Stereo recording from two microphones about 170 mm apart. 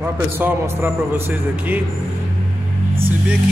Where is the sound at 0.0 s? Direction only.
15° right (ahead or behind).